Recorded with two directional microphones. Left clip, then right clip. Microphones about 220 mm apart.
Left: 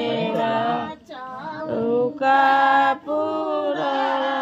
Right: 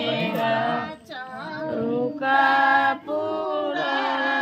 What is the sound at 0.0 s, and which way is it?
Music, 40° left (ahead or behind).